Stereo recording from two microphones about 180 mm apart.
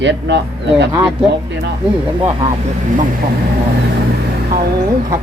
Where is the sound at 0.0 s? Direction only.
75° right (ahead or behind).